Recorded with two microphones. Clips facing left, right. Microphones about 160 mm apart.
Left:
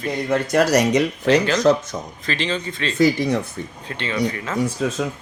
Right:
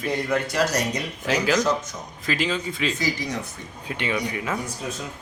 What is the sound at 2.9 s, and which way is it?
Speech, 60° left (ahead or behind).